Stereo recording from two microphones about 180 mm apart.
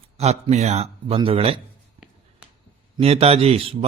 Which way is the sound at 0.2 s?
35° right (ahead or behind).